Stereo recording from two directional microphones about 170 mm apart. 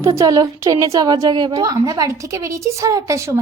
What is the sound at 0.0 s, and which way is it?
A woman's voice, 20° right (ahead or behind).